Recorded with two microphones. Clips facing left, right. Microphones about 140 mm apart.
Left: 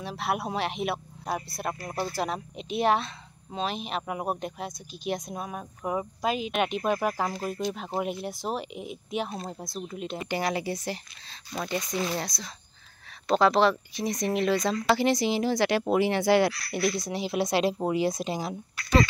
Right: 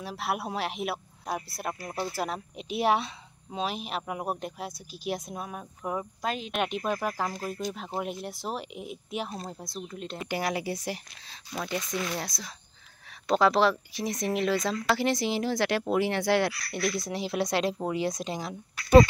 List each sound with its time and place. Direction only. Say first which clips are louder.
0.0 s speech: left 2 dB; 5° right (ahead or behind)
11.9 s speech: left 3 dB; 30° left (ahead or behind)
12.2 s speech: left 2 dB; 10° right (ahead or behind)